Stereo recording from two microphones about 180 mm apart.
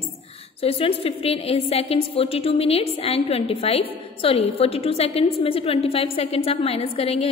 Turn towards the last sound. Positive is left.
turn(degrees=35)  # may be behind; listen again after turning